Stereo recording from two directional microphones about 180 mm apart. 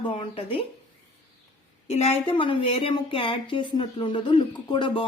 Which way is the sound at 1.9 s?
35° left (ahead or behind).